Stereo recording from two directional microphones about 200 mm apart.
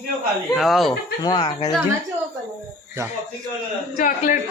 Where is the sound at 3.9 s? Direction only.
40° left (ahead or behind).